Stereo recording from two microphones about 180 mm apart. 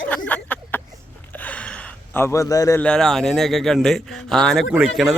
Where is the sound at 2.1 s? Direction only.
15° left (ahead or behind).